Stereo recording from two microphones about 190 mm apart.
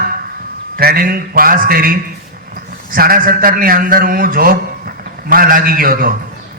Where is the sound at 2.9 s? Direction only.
50° right (ahead or behind).